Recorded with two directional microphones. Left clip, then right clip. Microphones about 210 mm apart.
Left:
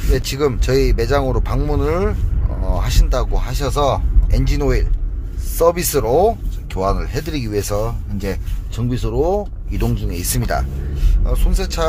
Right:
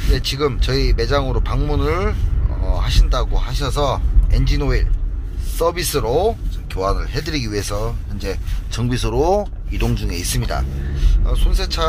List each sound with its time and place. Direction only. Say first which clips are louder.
0.0 s speech: left 2 dB; 45° left (ahead or behind)
7.2 s speech: left 1 dB; 30° left (ahead or behind)
7.7 s speech: left 4 dB; 45° left (ahead or behind)
8.7 s speech: right 1 dB; 15° left (ahead or behind)
10.3 s speech: left 3 dB; 40° left (ahead or behind)